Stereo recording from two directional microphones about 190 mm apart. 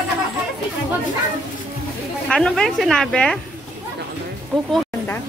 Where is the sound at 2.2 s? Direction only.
5° left (ahead or behind).